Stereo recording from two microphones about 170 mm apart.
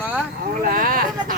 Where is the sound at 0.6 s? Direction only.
55° right (ahead or behind).